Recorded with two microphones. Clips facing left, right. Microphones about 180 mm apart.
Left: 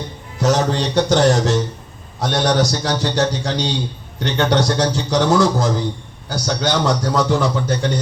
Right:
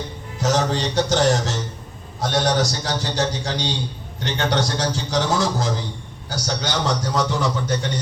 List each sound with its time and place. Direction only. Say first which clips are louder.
0.4 s a man's voice: left 3 dB; 60° left (ahead or behind)